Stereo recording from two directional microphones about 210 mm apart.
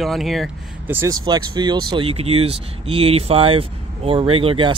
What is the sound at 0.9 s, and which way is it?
Speech, 15° right (ahead or behind).